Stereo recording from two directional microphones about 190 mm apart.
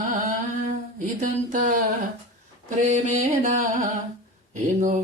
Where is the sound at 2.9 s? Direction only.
40° right (ahead or behind).